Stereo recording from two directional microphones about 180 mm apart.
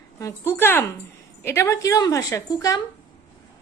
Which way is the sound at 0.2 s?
15° left (ahead or behind).